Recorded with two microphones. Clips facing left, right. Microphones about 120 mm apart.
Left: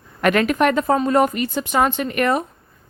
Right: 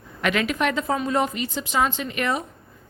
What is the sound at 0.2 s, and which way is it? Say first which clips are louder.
Speech: left 6 dB; 50° left (ahead or behind).